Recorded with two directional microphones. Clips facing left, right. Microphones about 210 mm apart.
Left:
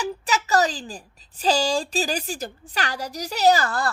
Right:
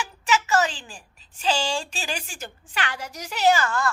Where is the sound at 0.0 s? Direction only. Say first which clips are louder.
Even; 35° left (ahead or behind).